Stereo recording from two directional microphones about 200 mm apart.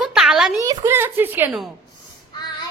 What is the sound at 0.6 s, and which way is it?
A woman's voice, 15° right (ahead or behind).